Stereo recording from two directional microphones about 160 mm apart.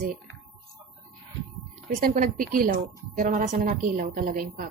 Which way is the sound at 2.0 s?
60° right (ahead or behind).